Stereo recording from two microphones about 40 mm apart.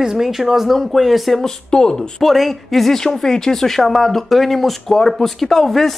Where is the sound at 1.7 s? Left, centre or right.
Centre.